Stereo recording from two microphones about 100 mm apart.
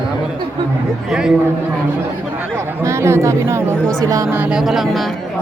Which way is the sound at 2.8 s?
30° right (ahead or behind).